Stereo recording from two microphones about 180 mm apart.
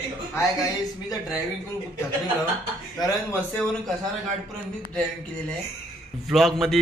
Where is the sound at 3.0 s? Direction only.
20° left (ahead or behind).